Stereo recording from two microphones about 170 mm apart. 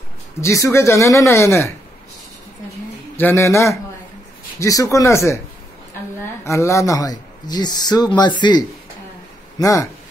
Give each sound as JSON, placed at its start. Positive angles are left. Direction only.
{"t": 0.4, "sound": "speech", "side_deg": 15}
{"t": 3.2, "sound": "speech", "side_deg": 15}
{"t": 6.4, "sound": "speech", "side_deg": 15}